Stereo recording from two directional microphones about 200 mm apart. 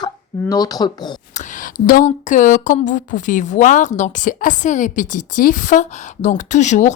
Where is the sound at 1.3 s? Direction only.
40° left (ahead or behind).